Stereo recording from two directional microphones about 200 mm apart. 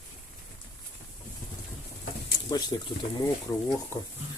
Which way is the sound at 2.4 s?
20° left (ahead or behind).